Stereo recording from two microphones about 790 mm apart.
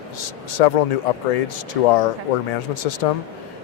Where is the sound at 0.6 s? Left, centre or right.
Left.